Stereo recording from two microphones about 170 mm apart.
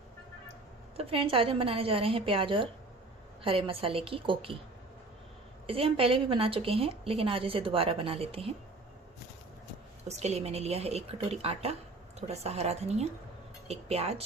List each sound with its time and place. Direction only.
0.9 s a woman's voice: 35° right (ahead or behind)
5.6 s a woman's voice: 35° right (ahead or behind)
10.1 s a woman's voice: 40° right (ahead or behind)